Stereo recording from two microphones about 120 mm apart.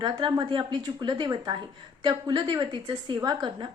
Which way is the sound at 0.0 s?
40° right (ahead or behind).